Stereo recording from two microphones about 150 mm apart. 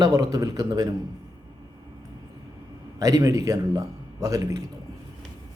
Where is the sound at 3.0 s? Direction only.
25° right (ahead or behind).